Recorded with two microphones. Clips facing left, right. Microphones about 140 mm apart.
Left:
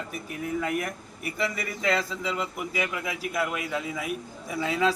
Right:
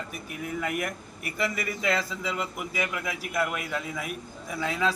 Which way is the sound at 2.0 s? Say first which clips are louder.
Left 1 dB; 25° left (ahead or behind).